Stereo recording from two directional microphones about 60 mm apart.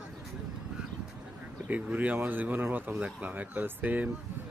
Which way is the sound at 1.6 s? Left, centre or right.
Right.